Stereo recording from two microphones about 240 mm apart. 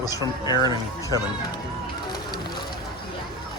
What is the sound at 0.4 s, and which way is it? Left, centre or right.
Speech, centre.